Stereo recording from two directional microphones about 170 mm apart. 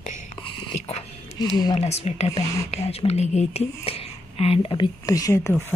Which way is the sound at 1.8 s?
40° left (ahead or behind).